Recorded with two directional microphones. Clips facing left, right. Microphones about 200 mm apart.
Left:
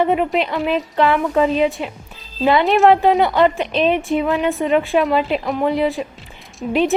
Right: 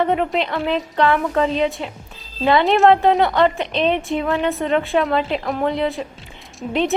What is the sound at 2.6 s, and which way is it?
Speech, centre (ahead or behind).